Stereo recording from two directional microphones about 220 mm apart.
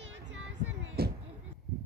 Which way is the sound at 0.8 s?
45° right (ahead or behind).